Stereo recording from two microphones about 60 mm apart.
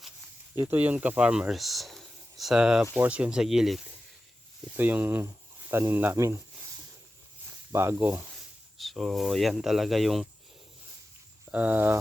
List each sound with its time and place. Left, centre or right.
0.7 s speech: right
1.5 s a sound: centre
2.6 s speech: centre
4.8 s speech: right
6.1 s speech: right
7.4 s snake: right
8.8 s speech: centre
11.4 s speech: right